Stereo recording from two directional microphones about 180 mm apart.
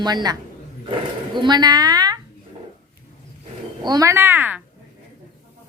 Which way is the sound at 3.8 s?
20° right (ahead or behind).